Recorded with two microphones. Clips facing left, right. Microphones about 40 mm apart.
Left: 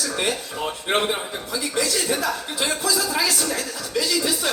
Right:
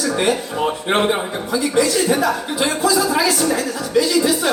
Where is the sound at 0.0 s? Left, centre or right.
Centre.